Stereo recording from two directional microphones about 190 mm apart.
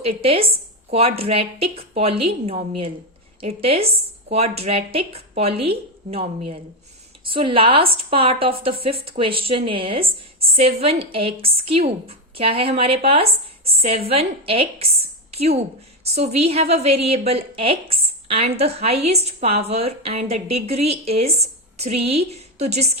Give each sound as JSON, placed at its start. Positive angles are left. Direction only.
{"t": 0.2, "sound": "a woman's voice", "side_deg": -30}